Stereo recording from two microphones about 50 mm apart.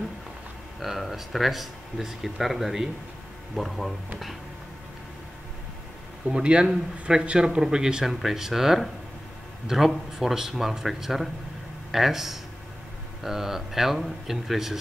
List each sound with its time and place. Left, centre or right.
0.7 s speech: centre
6.2 s speech: centre